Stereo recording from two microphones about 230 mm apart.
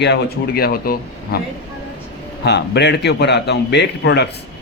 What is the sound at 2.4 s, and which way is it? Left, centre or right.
A man's voice, left.